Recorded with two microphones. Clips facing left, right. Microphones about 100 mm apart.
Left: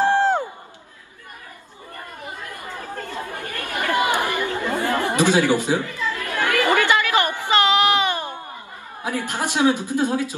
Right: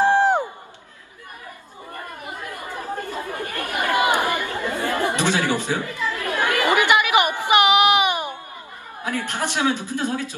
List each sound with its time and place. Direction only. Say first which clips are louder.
0.0 s crowd: right 1 dB; 15° right (ahead or behind)
2.5 s chatter: right 5 dB; 15° right (ahead or behind)
5.1 s speech: left 4 dB; 15° left (ahead or behind)
5.9 s chatter: right 1 dB; 15° right (ahead or behind)
9.0 s a woman's voice: left 1 dB; 15° left (ahead or behind)